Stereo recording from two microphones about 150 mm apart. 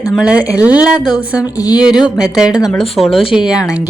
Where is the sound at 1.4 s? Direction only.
25° left (ahead or behind).